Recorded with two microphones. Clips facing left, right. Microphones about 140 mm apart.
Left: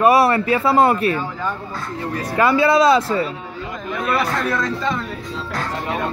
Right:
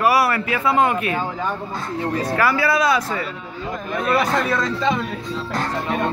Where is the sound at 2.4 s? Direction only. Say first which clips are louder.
Left 6 dB; 25° left (ahead or behind).